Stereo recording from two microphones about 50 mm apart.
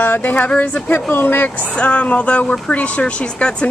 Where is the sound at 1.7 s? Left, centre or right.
Left.